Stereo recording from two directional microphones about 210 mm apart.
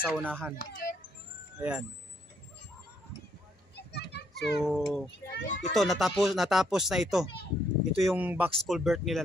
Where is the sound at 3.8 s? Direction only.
50° left (ahead or behind).